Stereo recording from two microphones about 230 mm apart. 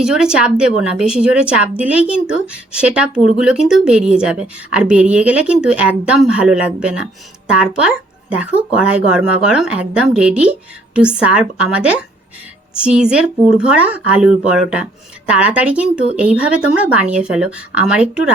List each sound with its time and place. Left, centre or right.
0.0 s a woman's voice: centre